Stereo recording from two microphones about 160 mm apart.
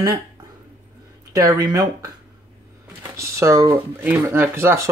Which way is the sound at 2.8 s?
20° right (ahead or behind).